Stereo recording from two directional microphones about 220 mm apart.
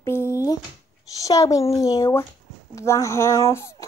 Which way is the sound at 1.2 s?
15° left (ahead or behind).